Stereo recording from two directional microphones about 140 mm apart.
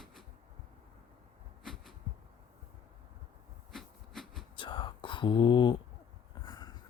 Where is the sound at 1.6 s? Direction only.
Centre (ahead or behind).